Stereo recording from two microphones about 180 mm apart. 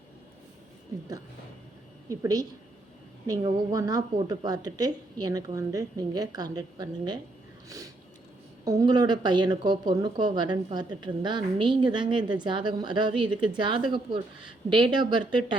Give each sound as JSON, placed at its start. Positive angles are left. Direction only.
{"t": 2.0, "sound": "speech", "side_deg": -20}
{"t": 8.6, "sound": "speech", "side_deg": -20}